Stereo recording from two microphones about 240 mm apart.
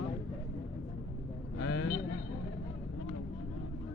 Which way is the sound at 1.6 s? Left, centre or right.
Left.